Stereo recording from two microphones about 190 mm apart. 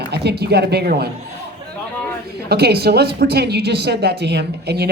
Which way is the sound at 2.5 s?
55° right (ahead or behind).